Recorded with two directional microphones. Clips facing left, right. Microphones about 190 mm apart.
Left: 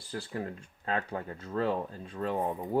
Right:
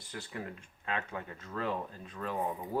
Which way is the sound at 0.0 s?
35° left (ahead or behind).